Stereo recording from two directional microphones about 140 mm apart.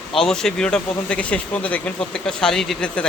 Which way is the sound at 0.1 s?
5° left (ahead or behind).